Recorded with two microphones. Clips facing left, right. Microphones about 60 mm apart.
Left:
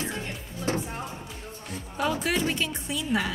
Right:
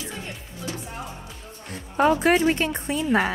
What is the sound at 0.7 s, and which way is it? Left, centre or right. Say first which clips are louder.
Music: left 6 dB; left.